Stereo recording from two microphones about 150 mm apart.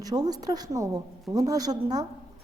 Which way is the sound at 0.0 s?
25° right (ahead or behind).